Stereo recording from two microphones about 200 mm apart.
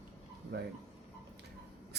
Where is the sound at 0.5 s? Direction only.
55° right (ahead or behind).